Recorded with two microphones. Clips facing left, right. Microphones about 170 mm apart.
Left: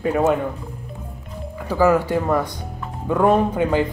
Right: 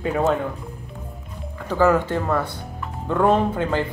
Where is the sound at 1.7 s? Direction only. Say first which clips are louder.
Left 1 dB; 10° left (ahead or behind).